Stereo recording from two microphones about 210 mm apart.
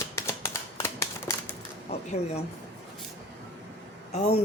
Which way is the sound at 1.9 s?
30° left (ahead or behind).